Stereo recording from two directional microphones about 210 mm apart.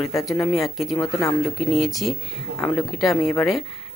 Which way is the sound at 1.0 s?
15° left (ahead or behind).